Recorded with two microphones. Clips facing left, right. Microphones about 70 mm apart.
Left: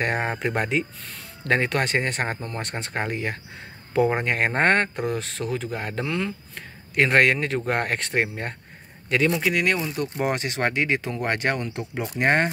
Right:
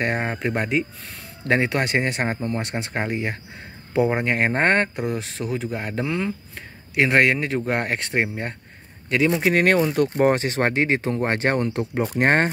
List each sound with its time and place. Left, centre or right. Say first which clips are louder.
0.0 s speech: right 1 dB; centre
9.3 s speech: right 4 dB; right
10.0 s speech: right 6 dB; right
11.5 s speech: right 6 dB; right